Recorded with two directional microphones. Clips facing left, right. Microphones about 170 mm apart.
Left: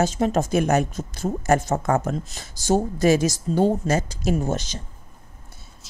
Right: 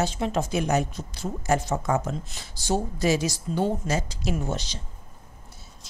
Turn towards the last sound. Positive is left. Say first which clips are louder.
# left 5 dB
turn(degrees=50)  # may be behind; listen again after turning